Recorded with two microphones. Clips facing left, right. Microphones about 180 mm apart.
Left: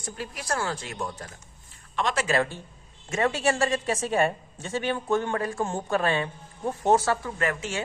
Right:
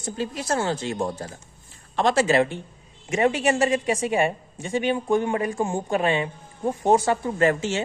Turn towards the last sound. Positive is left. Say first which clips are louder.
# right 7 dB
turn(degrees=-25)  # may be behind; listen again after turning